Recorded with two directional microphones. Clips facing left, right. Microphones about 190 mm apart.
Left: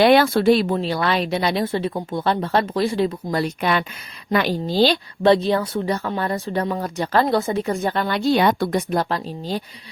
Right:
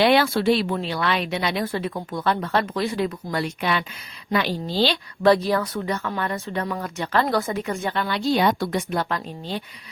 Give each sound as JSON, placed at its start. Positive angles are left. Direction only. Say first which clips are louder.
{"t": 0.0, "sound": "speech", "louder": "left 4 dB", "side_deg": 45}
{"t": 1.6, "sound": "a woman's voice", "louder": "left 4 dB", "side_deg": 25}
{"t": 5.2, "sound": "speech", "louder": "left 2 dB", "side_deg": 25}
{"t": 7.3, "sound": "speech", "louder": "left 4 dB", "side_deg": 25}